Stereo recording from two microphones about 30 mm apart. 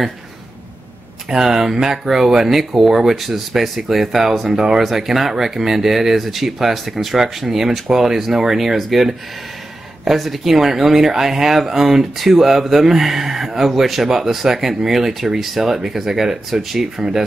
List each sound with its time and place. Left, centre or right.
1.3 s speech: right; by 4.2 s centre
4.5 s speech: centre